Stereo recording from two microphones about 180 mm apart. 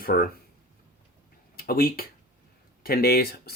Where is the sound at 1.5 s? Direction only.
55° left (ahead or behind).